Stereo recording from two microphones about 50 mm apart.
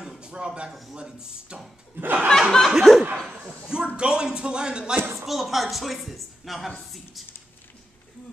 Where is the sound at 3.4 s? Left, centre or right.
Centre.